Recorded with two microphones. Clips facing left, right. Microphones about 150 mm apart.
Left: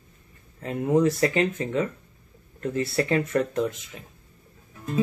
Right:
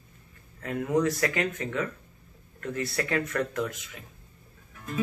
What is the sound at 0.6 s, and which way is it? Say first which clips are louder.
Speech: left 4 dB; 25° left (ahead or behind).